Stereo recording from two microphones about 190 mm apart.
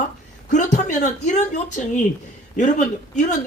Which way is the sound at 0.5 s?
40° left (ahead or behind).